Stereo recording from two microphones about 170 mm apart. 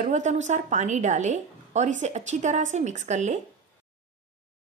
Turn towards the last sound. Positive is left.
turn(degrees=-45)  # may be behind; listen again after turning